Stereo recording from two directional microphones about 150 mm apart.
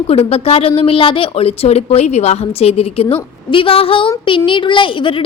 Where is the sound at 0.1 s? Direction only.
40° left (ahead or behind).